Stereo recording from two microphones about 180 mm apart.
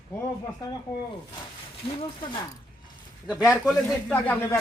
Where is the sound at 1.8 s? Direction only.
30° left (ahead or behind).